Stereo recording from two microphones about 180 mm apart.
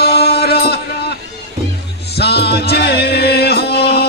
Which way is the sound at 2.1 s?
65° left (ahead or behind).